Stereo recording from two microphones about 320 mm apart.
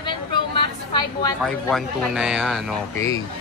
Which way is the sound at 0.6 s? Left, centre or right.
Centre.